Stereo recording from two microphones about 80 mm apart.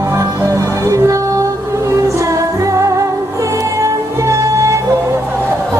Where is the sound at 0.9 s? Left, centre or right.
Right.